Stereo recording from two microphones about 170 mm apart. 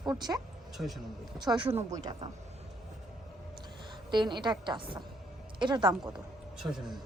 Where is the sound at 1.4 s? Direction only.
25° right (ahead or behind).